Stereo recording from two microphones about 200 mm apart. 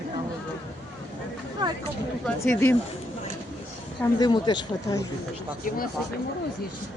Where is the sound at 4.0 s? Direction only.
20° left (ahead or behind).